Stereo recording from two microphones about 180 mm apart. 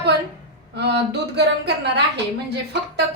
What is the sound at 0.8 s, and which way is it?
Speech, 65° right (ahead or behind).